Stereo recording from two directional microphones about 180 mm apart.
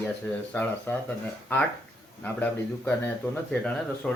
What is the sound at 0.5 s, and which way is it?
Speech, 10° left (ahead or behind).